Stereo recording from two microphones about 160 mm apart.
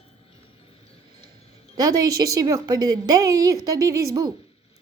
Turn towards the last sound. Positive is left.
turn(degrees=-20)  # may be behind; listen again after turning